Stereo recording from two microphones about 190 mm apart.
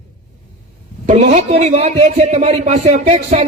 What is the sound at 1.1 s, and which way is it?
Speech, 40° right (ahead or behind).